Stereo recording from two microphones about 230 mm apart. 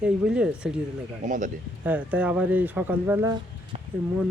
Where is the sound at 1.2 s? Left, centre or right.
Right.